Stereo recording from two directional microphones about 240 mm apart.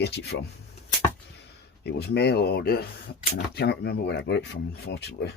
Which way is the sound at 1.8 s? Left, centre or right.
Left.